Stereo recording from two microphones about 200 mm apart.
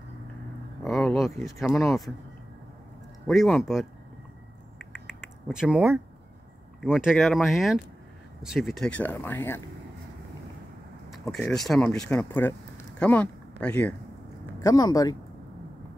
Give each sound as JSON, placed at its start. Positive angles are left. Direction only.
{"t": 0.8, "sound": "speech", "side_deg": 0}
{"t": 3.3, "sound": "speech", "side_deg": 0}
{"t": 4.9, "sound": "a sound", "side_deg": 10}
{"t": 5.5, "sound": "speech", "side_deg": -5}
{"t": 11.1, "sound": "speech", "side_deg": 0}